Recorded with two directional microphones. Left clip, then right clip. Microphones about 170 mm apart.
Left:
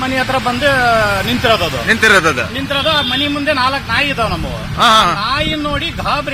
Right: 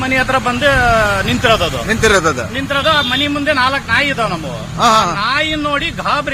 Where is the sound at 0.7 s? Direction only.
Centre (ahead or behind).